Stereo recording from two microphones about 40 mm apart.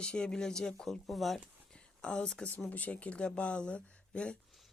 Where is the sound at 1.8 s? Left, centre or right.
Left.